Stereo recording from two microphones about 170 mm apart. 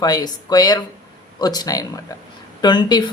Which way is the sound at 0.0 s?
20° left (ahead or behind).